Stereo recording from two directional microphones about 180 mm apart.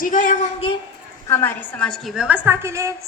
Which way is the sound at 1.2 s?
10° left (ahead or behind).